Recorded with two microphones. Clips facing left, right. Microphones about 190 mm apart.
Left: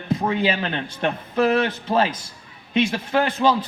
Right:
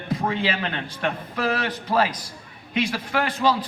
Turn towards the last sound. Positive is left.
turn(degrees=25)  # may be behind; listen again after turning